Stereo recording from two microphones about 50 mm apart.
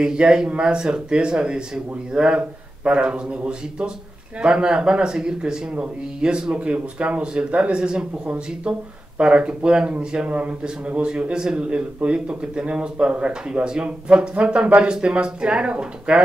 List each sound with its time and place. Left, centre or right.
0.0 s speech: centre